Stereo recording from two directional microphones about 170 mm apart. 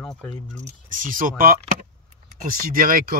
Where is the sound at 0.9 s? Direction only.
50° right (ahead or behind).